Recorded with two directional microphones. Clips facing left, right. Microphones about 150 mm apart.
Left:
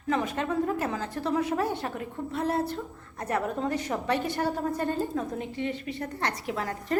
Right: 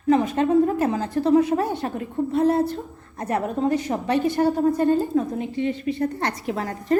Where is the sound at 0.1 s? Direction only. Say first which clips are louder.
Right 10 dB; 30° right (ahead or behind).